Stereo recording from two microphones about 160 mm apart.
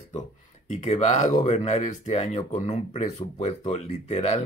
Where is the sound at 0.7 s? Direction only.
50° left (ahead or behind).